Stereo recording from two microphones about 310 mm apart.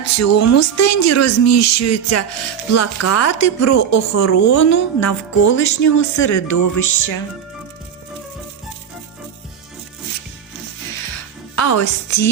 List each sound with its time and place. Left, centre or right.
0.2 s a woman's voice: left
10.9 s music: left